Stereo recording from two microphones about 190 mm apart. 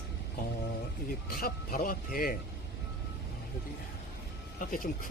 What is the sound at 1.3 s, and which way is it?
Speech, 50° left (ahead or behind).